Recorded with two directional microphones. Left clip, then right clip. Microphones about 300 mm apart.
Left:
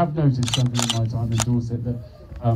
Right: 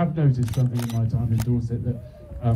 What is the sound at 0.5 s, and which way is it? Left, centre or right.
Speech, left.